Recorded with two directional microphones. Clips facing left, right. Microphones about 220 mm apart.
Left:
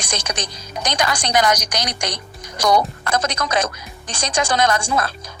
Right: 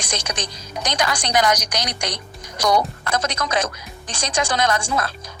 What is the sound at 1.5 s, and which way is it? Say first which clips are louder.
Speech: left 1 dB; 45° left (ahead or behind).